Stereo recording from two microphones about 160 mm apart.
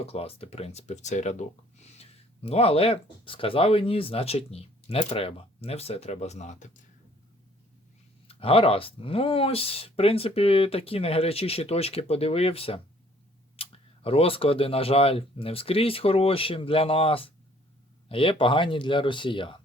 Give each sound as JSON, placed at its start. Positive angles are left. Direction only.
{"t": 0.0, "sound": "speech", "side_deg": 40}
{"t": 8.3, "sound": "speech", "side_deg": 35}